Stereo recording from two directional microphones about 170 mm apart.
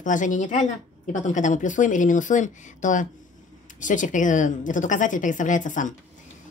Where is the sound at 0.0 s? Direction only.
50° left (ahead or behind).